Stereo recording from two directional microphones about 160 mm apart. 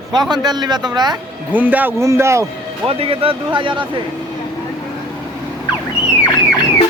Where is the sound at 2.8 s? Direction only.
35° right (ahead or behind).